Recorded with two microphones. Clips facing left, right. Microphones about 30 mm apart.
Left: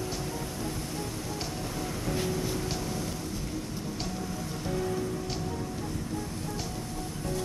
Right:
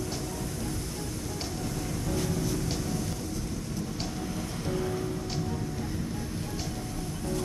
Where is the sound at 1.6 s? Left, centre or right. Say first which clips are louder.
Even; centre.